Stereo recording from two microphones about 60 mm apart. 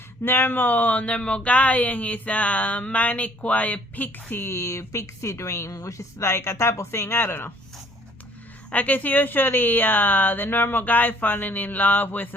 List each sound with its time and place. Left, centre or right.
0.3 s speech: left
4.4 s a woman's voice: left
8.7 s speech: left